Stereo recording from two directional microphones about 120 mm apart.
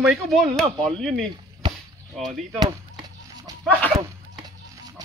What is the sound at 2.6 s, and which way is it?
Chop, 35° right (ahead or behind).